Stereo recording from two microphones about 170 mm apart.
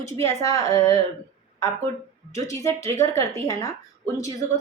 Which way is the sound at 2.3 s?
20° left (ahead or behind).